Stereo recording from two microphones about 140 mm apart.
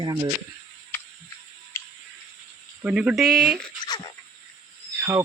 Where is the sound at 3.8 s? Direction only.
30° left (ahead or behind).